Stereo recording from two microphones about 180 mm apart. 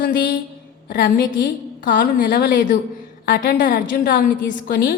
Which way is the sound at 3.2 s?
50° left (ahead or behind).